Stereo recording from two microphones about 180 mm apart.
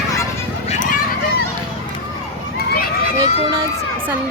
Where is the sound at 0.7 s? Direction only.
45° left (ahead or behind).